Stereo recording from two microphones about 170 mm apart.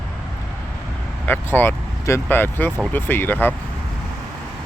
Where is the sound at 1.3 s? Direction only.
10° left (ahead or behind).